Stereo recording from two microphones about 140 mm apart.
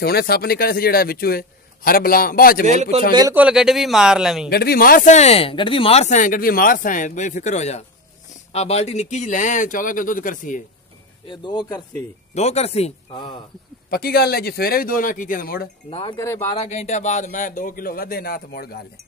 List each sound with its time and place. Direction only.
0.0 s a man's voice: 90° left
2.6 s a man's voice: 55° right (ahead or behind)
3.1 s speech: 30° right (ahead or behind)
3.3 s speech: 5° right (ahead or behind)
4.5 s speech: 90° left; by 10.6 s 70° left (ahead or behind)
11.2 s a man's voice: 35° left (ahead or behind)
12.4 s speech: 50° left (ahead or behind)
13.8 s a man's voice: 90° left
15.9 s a man's voice: 35° left (ahead or behind)
16.2 s speech: 20° left (ahead or behind)
16.5 s a man's voice: 50° left (ahead or behind); by 18.9 s 90° left